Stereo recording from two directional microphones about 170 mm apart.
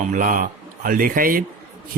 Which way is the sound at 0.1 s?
50° right (ahead or behind).